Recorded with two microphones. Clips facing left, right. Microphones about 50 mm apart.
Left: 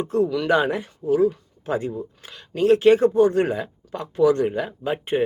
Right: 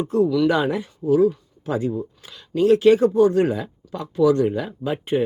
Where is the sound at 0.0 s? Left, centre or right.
Left.